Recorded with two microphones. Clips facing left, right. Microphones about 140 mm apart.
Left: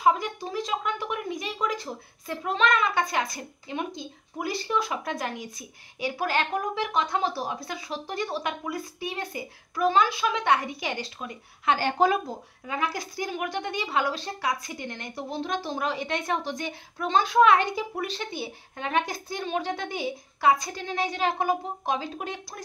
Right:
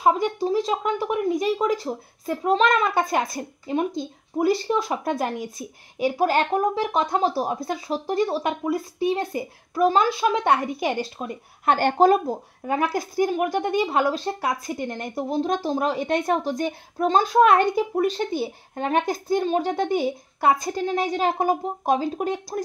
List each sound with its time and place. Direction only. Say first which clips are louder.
0.0 s speech: right 4 dB; 35° right (ahead or behind)